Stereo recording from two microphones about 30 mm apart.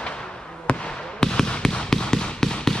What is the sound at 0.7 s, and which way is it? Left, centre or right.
Basketball bounce, left.